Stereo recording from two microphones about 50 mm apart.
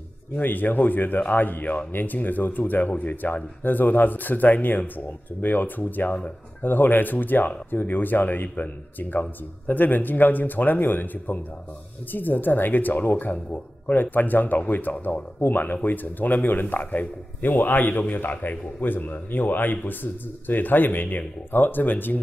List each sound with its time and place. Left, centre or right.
0.4 s speech: left